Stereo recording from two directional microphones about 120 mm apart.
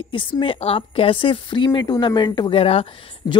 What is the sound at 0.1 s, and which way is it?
A woman's voice, 45° left (ahead or behind).